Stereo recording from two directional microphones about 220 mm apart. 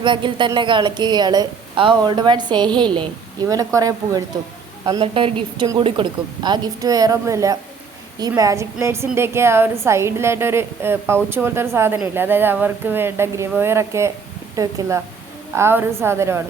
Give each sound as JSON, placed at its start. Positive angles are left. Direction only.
{"t": 0.0, "sound": "a woman's voice", "side_deg": -20}